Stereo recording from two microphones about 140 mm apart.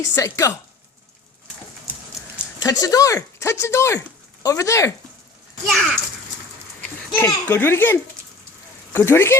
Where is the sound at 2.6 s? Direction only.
25° left (ahead or behind).